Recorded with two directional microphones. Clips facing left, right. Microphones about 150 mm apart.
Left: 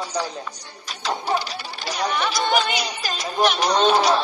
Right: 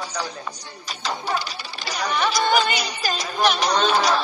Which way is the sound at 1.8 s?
Centre (ahead or behind).